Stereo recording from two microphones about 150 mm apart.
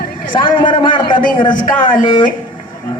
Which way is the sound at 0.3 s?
35° left (ahead or behind).